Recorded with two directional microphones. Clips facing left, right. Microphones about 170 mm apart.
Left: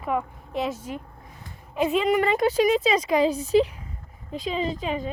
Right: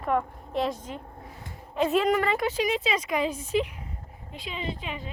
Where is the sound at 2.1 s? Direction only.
20° left (ahead or behind).